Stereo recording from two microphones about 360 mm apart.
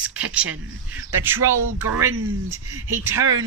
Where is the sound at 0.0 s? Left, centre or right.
Centre.